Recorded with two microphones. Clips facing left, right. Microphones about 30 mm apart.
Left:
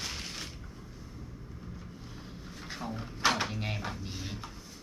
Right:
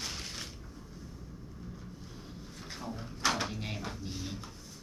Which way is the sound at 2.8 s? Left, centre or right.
Centre.